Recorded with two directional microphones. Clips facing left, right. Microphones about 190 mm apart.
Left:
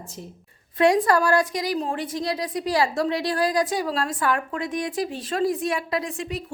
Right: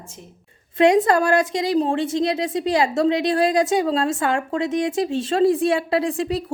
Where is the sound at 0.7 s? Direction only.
25° right (ahead or behind).